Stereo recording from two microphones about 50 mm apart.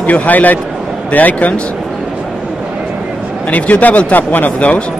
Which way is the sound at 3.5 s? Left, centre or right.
Left.